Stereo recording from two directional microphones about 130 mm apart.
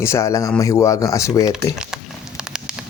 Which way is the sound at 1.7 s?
5° right (ahead or behind).